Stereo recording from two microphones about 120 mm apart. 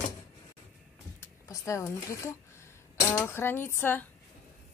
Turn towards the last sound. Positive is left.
turn(degrees=15)  # may be behind; listen again after turning